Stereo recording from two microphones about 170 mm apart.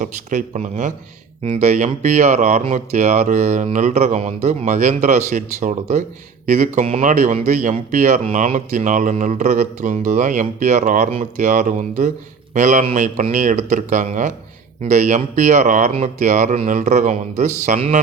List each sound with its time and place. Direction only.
0.0 s speech: 50° right (ahead or behind)